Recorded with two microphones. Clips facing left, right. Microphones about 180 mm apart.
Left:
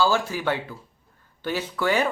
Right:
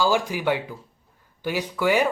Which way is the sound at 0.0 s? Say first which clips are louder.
Right 1 dB; 15° right (ahead or behind).